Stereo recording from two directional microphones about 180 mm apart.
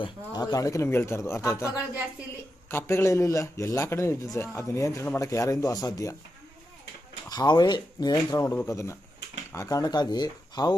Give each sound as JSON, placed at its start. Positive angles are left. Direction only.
{"t": 0.0, "sound": "a man's voice", "side_deg": 20}
{"t": 7.3, "sound": "a man's voice", "side_deg": 20}